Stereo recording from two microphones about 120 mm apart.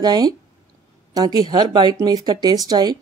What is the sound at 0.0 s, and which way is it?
Speech, 35° right (ahead or behind).